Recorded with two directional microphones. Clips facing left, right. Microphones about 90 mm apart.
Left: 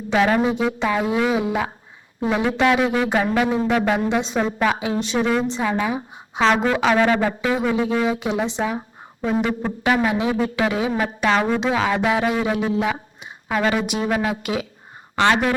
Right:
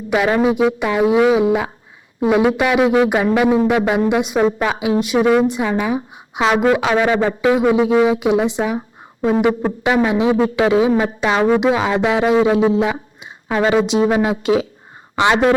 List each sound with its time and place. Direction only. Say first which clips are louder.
0.1 s speech: right 3 dB; 15° right (ahead or behind)
7.2 s speech: right 6 dB; 25° right (ahead or behind)
15.1 s speech: right 3 dB; 15° right (ahead or behind)